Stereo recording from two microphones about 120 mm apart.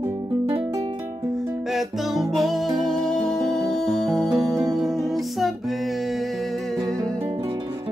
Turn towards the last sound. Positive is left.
turn(degrees=0)  # may be behind; listen again after turning